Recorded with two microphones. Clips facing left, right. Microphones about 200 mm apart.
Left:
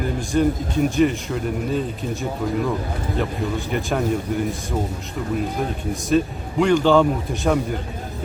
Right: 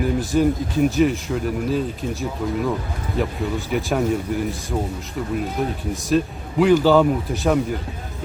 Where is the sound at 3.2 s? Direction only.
5° right (ahead or behind).